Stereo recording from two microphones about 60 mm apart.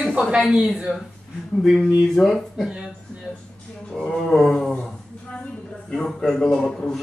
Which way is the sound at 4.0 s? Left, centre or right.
Centre.